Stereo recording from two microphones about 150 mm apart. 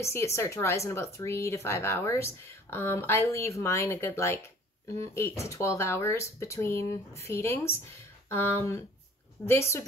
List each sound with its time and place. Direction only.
0.0 s speech: 20° left (ahead or behind)